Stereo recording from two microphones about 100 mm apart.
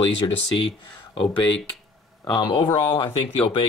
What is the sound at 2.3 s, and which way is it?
Speech, 50° left (ahead or behind).